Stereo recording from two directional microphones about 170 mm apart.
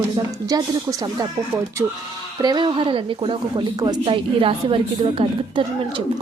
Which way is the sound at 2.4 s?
25° right (ahead or behind).